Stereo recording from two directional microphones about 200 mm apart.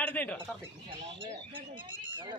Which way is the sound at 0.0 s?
10° left (ahead or behind).